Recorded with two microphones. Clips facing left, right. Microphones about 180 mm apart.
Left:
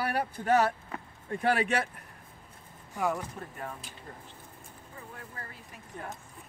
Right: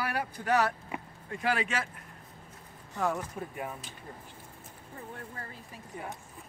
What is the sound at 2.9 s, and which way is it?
Speech, 5° left (ahead or behind).